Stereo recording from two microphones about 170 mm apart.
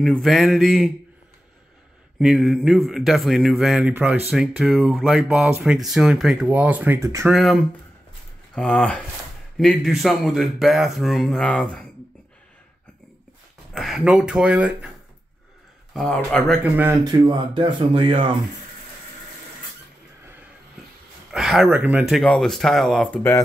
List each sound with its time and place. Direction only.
0.0 s speech: centre (ahead or behind)
2.1 s speech: centre (ahead or behind); by 7.3 s 15° right (ahead or behind)
7.3 s speech: centre (ahead or behind)
13.7 s speech: centre (ahead or behind)
15.9 s speech: 5° left (ahead or behind)
16.7 s speech: 15° right (ahead or behind); by 18.3 s 30° right (ahead or behind)
21.3 s speech: centre (ahead or behind)
22.2 s speech: 5° left (ahead or behind)